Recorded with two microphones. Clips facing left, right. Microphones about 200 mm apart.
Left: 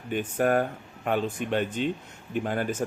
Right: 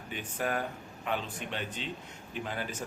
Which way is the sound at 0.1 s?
50° left (ahead or behind).